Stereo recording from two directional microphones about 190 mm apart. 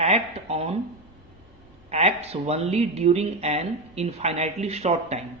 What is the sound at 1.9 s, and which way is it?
Speech, 35° right (ahead or behind).